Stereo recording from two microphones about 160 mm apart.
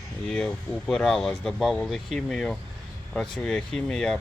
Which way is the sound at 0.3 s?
5° left (ahead or behind).